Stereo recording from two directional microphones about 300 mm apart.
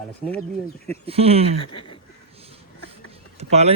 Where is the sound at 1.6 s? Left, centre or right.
Centre.